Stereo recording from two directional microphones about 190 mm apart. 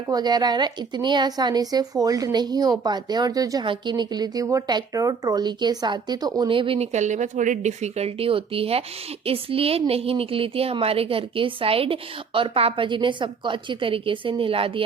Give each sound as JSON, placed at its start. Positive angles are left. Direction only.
{"t": 0.1, "sound": "speech", "side_deg": -20}